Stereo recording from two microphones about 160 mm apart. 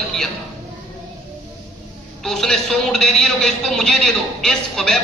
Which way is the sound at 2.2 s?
Centre (ahead or behind).